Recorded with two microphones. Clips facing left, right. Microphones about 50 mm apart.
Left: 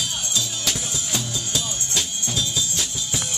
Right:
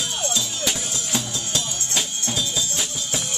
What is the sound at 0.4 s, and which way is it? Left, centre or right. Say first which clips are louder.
Music: right 1 dB; centre.